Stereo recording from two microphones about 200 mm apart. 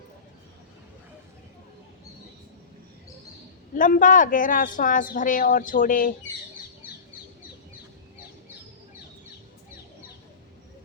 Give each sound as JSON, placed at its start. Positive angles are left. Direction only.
{"t": 3.8, "sound": "speech", "side_deg": 40}